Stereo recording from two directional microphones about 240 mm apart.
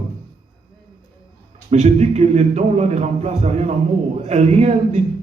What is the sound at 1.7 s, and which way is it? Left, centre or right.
A man's voice, right.